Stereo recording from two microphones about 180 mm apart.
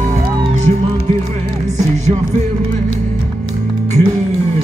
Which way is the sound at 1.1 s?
35° right (ahead or behind).